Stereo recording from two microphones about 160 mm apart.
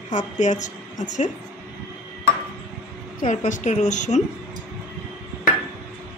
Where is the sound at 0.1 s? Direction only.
50° left (ahead or behind).